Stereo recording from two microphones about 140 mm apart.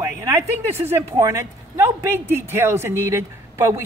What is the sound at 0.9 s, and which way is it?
A man's voice, 20° right (ahead or behind).